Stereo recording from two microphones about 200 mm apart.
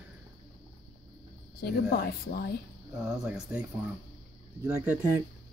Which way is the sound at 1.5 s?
50° left (ahead or behind).